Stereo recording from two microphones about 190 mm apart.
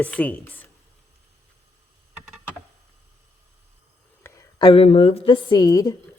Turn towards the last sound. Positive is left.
turn(degrees=20)  # may be behind; listen again after turning